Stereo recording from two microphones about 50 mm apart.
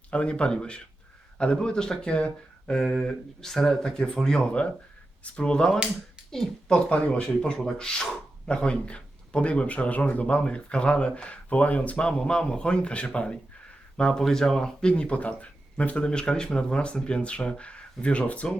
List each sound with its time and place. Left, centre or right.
0.1 s speech: left
2.9 s speech: centre; by 12.0 s left
12.0 s speech: centre